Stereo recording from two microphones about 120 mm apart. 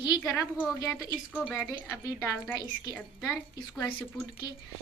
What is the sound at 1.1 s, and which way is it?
Speech, 10° right (ahead or behind).